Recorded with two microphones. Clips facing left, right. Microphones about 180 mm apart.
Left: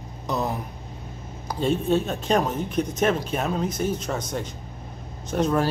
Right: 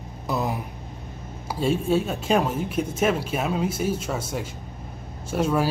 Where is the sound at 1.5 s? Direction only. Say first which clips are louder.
Even; 10° right (ahead or behind).